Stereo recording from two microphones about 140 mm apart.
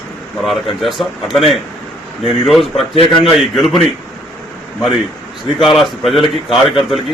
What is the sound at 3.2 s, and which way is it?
Speech, centre (ahead or behind).